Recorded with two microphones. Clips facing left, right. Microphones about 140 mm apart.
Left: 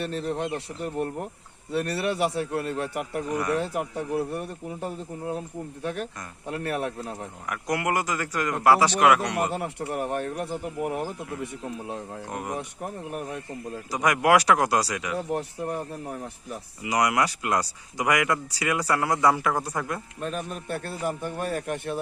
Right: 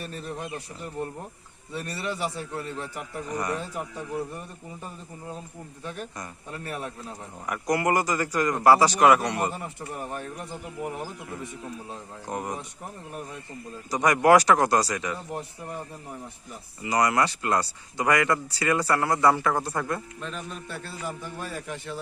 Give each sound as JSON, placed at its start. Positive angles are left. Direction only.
{"t": 0.0, "sound": "a man's voice", "side_deg": 70}
{"t": 7.4, "sound": "speech", "side_deg": 0}
{"t": 9.5, "sound": "a man's voice", "side_deg": 70}
{"t": 12.3, "sound": "speech", "side_deg": 0}
{"t": 13.9, "sound": "speech", "side_deg": 5}
{"t": 15.3, "sound": "speech", "side_deg": 75}
{"t": 16.8, "sound": "speech", "side_deg": 10}
{"t": 20.1, "sound": "a man's voice", "side_deg": 50}